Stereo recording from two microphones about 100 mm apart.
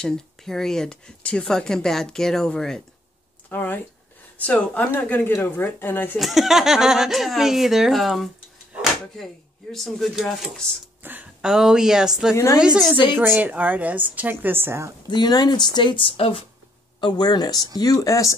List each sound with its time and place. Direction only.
0.0 s speech: 5° left (ahead or behind)
3.4 s speech: 20° left (ahead or behind)
6.1 s speech: centre (ahead or behind)
11.0 s a sound: 20° right (ahead or behind)
11.4 s speech: 5° right (ahead or behind)
13.1 s a woman's voice: 20° right (ahead or behind)
15.0 s speech: 45° left (ahead or behind); by 16.4 s 65° left (ahead or behind)
17.0 s speech: 45° left (ahead or behind)